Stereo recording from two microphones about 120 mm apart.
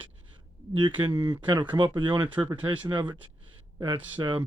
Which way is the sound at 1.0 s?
35° right (ahead or behind).